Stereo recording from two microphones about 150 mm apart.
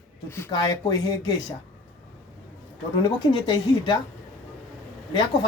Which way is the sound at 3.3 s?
30° left (ahead or behind).